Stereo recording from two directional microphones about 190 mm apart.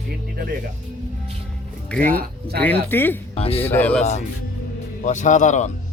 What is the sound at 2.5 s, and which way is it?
Speech, 10° left (ahead or behind).